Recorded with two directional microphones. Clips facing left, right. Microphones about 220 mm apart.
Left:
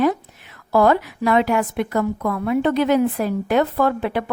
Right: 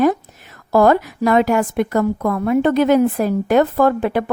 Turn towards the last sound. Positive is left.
turn(degrees=-45)  # may be behind; listen again after turning